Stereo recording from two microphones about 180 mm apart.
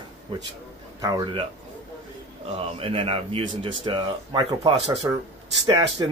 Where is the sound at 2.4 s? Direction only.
30° right (ahead or behind); by 5.2 s 15° right (ahead or behind).